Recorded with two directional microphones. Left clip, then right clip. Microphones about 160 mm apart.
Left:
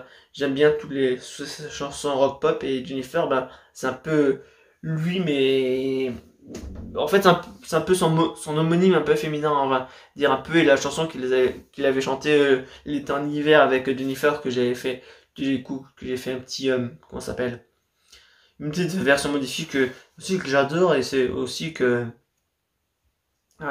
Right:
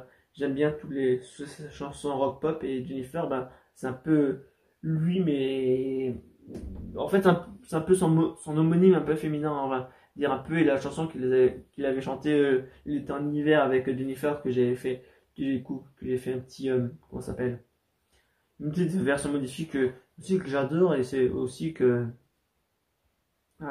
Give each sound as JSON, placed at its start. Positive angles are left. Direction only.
{"t": 0.3, "sound": "speech", "side_deg": 15}
{"t": 16.4, "sound": "speech", "side_deg": 15}
{"t": 18.6, "sound": "speech", "side_deg": 15}